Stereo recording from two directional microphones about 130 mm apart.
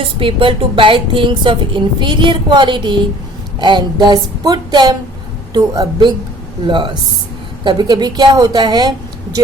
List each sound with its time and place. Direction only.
0.0 s a woman's voice: 45° right (ahead or behind)